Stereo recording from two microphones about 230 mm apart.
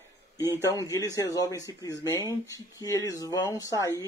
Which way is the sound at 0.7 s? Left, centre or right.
Centre.